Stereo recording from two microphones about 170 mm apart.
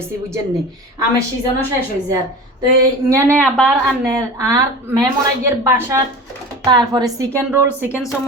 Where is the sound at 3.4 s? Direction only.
Centre (ahead or behind).